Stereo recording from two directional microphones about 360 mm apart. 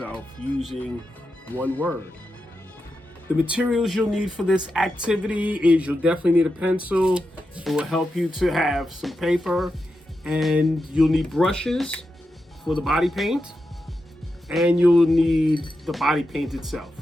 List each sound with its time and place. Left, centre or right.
0.0 s speech: centre
3.5 s speech: centre